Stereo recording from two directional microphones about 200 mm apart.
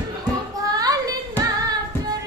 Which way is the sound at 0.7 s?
20° right (ahead or behind).